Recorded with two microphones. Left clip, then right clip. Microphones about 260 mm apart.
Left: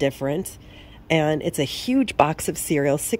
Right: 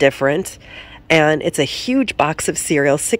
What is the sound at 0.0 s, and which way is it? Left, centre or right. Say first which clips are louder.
Speech: right 9 dB; centre.